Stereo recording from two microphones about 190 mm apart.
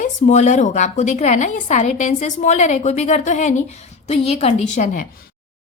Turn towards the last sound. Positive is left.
turn(degrees=40)  # may be behind; listen again after turning